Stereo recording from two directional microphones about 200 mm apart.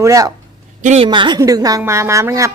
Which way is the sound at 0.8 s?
30° right (ahead or behind).